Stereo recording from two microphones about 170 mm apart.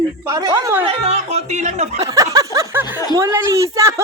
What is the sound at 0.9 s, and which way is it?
Speech, 40° right (ahead or behind).